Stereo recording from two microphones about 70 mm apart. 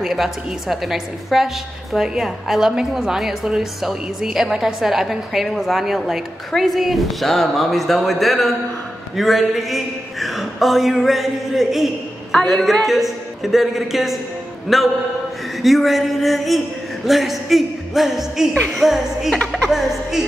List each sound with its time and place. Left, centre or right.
0.0 s a woman's voice: centre
18.5 s music: centre
18.8 s a woman's voice: centre